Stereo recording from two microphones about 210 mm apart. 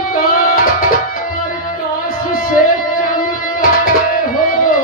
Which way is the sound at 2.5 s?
40° left (ahead or behind).